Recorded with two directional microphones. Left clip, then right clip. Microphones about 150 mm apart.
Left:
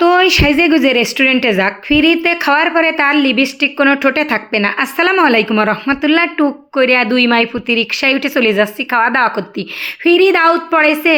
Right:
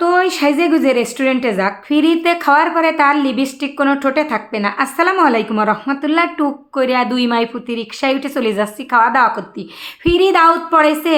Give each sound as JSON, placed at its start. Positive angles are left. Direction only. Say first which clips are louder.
{"t": 0.0, "sound": "a woman's voice", "louder": "left 4 dB", "side_deg": 30}
{"t": 10.0, "sound": "a woman's voice", "louder": "left 1 dB", "side_deg": 15}